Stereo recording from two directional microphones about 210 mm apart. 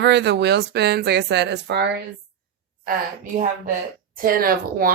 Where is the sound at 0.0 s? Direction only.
55° right (ahead or behind).